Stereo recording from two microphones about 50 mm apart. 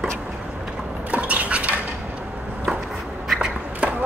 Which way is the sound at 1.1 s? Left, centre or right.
Right.